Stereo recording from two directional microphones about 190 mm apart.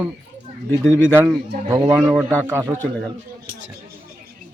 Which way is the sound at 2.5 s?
15° right (ahead or behind).